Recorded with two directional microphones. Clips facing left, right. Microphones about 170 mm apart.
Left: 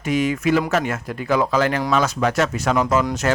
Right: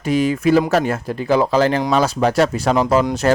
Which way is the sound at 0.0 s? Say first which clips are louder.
Right 3 dB; 35° right (ahead or behind).